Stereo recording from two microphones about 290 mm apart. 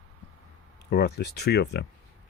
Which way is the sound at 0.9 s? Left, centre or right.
Left.